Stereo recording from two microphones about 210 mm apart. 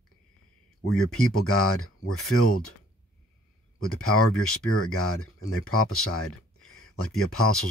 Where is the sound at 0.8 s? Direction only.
90° left.